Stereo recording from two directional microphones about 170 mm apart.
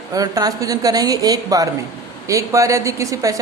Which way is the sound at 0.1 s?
20° right (ahead or behind).